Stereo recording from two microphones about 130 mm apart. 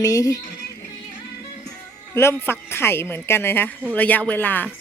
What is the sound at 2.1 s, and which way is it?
A woman's voice, 20° left (ahead or behind).